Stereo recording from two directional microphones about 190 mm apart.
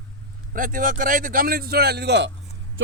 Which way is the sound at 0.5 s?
45° right (ahead or behind).